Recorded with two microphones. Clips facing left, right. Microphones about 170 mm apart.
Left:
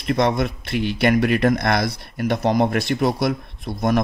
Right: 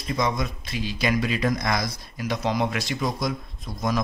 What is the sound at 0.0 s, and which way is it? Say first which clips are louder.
Speech: left 6 dB; 65° left (ahead or behind).